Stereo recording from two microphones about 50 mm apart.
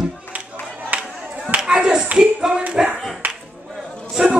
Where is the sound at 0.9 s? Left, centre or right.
Right.